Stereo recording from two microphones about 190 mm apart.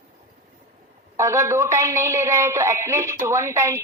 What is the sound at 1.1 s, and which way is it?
Speech, 15° right (ahead or behind).